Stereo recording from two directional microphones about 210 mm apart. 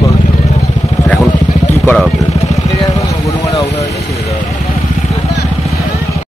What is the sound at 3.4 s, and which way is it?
Vehicle, 15° left (ahead or behind).